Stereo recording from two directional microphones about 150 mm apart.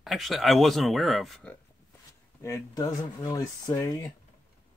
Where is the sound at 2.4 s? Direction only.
20° left (ahead or behind).